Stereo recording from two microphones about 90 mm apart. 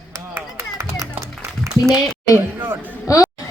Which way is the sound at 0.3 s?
30° right (ahead or behind).